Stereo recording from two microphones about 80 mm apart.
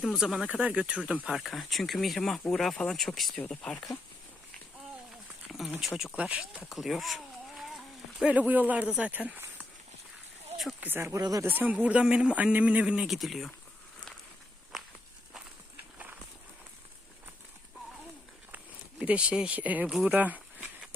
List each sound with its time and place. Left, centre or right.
0.0 s speech: centre
0.4 s speech: centre
1.4 s speech: centre
3.3 s speech: centre
5.5 s a sound: centre
6.1 s speech: centre
6.7 s speech: centre
8.2 s speech: centre
10.8 s speech: right
11.2 s speech: right
11.4 s speech: right; by 13.5 s centre
18.5 s a sound: centre